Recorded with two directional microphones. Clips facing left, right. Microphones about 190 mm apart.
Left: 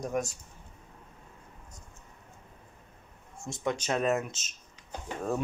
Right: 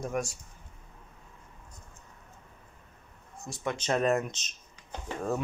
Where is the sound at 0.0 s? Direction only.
20° left (ahead or behind).